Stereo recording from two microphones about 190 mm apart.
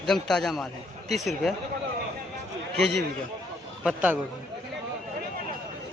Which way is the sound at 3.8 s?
5° right (ahead or behind).